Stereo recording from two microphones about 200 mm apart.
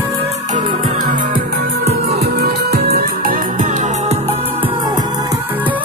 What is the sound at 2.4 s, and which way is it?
Music, 50° right (ahead or behind).